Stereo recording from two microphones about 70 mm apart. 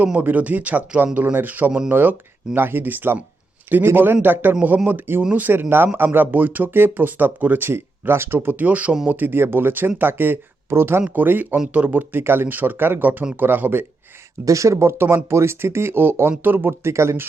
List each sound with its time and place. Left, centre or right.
0.0 s speech: right
11.1 s speech: right
14.4 s speech: right